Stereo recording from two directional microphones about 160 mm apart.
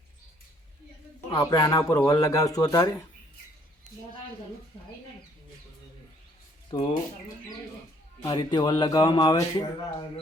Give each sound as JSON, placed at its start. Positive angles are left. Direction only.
{"t": 1.3, "sound": "speech", "side_deg": 25}
{"t": 6.7, "sound": "speech", "side_deg": 30}
{"t": 8.2, "sound": "speech", "side_deg": 30}